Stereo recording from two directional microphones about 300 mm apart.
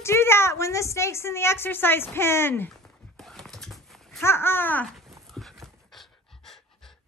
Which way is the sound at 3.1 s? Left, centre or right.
Centre.